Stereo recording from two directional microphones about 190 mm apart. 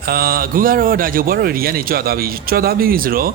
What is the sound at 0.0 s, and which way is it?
Speech, 50° right (ahead or behind).